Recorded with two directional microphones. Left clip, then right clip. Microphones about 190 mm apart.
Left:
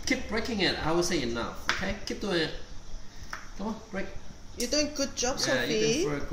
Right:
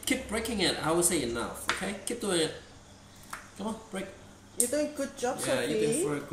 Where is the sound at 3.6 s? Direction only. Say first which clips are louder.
Even; 10° left (ahead or behind).